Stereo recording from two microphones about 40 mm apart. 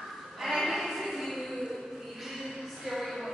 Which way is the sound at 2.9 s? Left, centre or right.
Centre.